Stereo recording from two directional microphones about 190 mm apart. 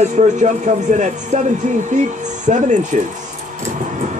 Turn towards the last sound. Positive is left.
turn(degrees=-40)  # may be behind; listen again after turning